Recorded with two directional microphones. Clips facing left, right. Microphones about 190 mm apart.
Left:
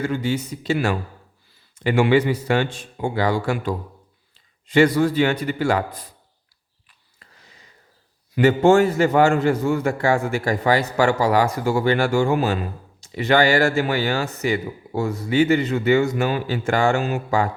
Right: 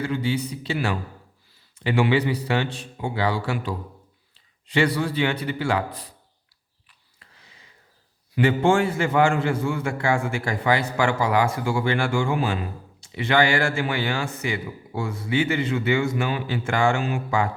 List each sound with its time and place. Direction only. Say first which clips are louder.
0.0 s a man's voice: left 2 dB; 45° left (ahead or behind)
8.4 s a man's voice: left 5 dB; 40° left (ahead or behind)